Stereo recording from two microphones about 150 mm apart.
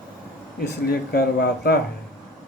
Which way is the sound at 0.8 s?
90° left.